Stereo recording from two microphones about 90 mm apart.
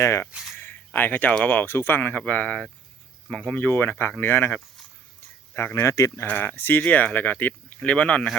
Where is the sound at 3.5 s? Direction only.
20° left (ahead or behind).